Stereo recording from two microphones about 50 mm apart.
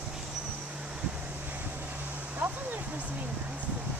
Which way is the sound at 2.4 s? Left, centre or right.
Right.